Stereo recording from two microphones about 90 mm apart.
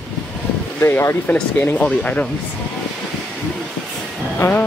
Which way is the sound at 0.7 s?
25° left (ahead or behind).